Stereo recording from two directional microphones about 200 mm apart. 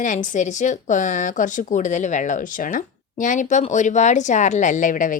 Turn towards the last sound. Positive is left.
turn(degrees=40)  # may be behind; listen again after turning